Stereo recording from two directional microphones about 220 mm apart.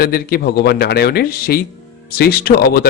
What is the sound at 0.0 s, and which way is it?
Speech, 45° left (ahead or behind).